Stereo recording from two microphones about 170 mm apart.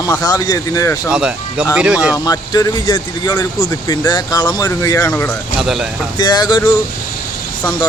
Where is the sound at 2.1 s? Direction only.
20° left (ahead or behind).